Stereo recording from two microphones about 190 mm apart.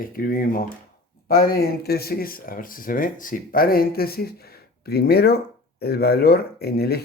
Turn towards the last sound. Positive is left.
turn(degrees=55)  # may be behind; listen again after turning